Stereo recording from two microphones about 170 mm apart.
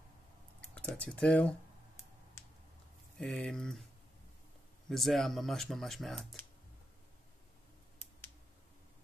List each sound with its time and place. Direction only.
0.7 s speech: 5° left (ahead or behind)
3.2 s speech: 5° left (ahead or behind)
4.8 s speech: centre (ahead or behind)